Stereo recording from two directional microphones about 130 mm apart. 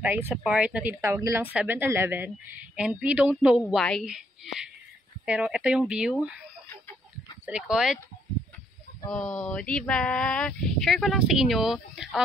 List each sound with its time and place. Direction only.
0.0 s speech: 15° right (ahead or behind)
1.0 s speech: 20° right (ahead or behind)
3.6 s speech: 5° left (ahead or behind)
7.4 s speech: 5° right (ahead or behind)
9.1 s speech: 5° left (ahead or behind)